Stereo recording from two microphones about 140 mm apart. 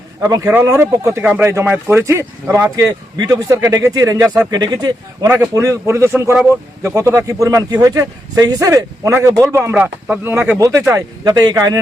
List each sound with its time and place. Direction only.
0.2 s a man's voice: 25° right (ahead or behind)